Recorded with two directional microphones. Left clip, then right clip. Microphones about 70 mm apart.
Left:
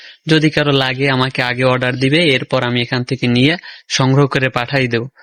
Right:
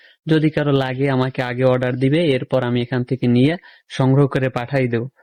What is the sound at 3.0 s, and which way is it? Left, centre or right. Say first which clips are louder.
Speech: left 1 dB; right.